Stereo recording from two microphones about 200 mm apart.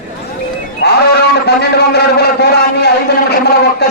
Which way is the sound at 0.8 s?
55° left (ahead or behind).